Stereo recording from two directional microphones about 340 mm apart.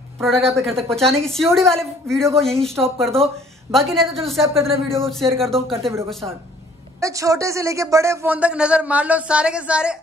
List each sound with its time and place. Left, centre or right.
0.2 s speech: centre
5.0 s speech: centre
5.8 s speech: centre